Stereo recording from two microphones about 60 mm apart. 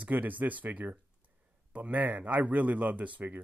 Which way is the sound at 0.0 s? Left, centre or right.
Right.